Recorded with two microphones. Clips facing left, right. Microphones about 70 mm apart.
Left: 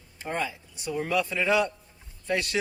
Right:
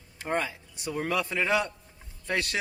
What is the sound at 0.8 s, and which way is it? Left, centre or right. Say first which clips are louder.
Speech: left 2 dB; right.